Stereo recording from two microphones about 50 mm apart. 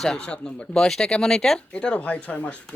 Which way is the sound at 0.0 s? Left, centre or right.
Centre.